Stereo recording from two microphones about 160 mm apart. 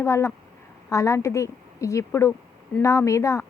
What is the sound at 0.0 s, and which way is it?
Speech, 15° left (ahead or behind).